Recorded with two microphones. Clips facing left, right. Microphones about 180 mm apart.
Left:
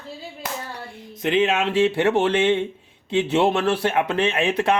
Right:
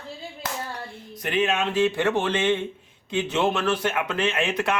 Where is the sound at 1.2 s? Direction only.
25° left (ahead or behind).